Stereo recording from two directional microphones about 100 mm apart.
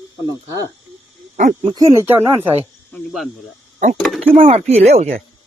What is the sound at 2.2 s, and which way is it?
Speech, 25° right (ahead or behind).